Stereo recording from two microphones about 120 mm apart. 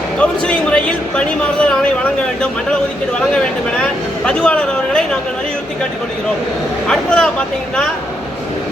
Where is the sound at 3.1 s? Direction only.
10° left (ahead or behind).